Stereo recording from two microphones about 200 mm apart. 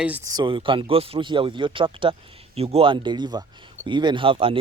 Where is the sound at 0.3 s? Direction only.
20° right (ahead or behind).